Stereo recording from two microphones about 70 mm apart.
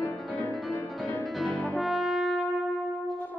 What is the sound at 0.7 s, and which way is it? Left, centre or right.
Music, left.